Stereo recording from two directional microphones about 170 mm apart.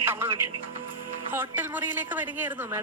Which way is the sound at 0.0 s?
10° right (ahead or behind).